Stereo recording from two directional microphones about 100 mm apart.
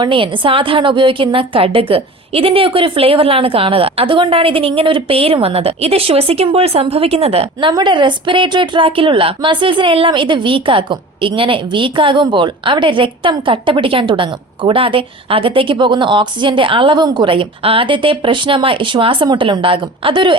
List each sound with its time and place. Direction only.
0.0 s a woman's voice: 55° right (ahead or behind); by 7.4 s 90° right
7.7 s a woman's voice: 45° right (ahead or behind)